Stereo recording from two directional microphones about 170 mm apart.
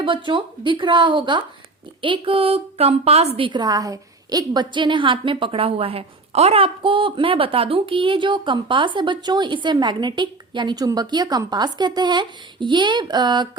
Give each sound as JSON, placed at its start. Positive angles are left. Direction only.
{"t": 0.0, "sound": "a woman's voice", "side_deg": -30}